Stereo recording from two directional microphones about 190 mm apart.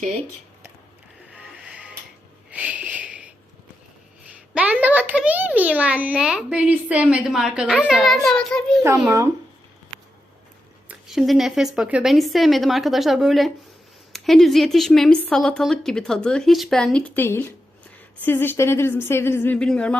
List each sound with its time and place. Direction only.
1.4 s music: 5° right (ahead or behind)
2.5 s a sound: 5° right (ahead or behind)
4.5 s a child's voice: 5° right (ahead or behind)
8.8 s a child's voice: 15° right (ahead or behind)
10.8 s a woman's voice: centre (ahead or behind)